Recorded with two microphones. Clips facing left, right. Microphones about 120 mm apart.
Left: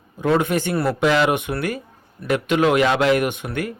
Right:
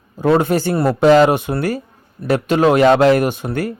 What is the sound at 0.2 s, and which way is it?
Speech, 35° right (ahead or behind).